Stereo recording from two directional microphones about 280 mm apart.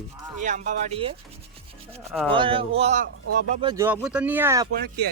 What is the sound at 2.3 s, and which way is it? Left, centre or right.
Speech, centre.